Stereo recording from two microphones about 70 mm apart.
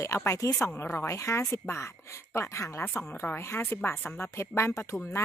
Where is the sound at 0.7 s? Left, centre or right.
Left.